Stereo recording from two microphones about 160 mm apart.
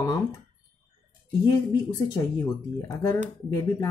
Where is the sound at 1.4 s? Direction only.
25° left (ahead or behind).